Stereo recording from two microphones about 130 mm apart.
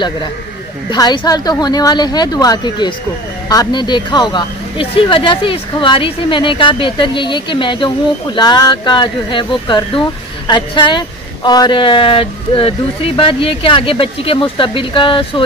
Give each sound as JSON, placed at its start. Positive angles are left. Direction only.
{"t": 0.8, "sound": "speech", "side_deg": 35}